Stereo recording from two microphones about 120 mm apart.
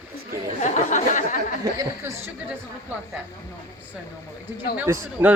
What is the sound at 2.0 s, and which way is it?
Speech, 20° right (ahead or behind).